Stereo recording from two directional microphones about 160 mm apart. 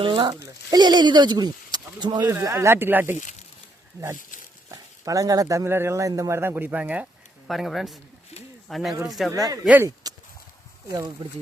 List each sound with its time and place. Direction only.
0.0 s speech: 30° right (ahead or behind); by 3.2 s 15° right (ahead or behind)
4.7 s speech: 20° right (ahead or behind); by 9.3 s centre (ahead or behind)
9.6 s speech: 10° right (ahead or behind)
10.8 s speech: 25° right (ahead or behind)